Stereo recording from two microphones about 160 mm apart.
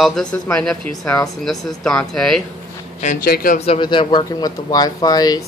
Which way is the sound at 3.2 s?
65° left (ahead or behind).